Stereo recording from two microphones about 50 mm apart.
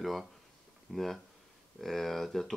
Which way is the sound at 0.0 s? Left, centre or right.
Centre.